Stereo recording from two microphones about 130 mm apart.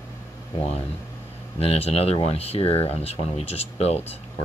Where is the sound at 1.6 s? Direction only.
50° left (ahead or behind).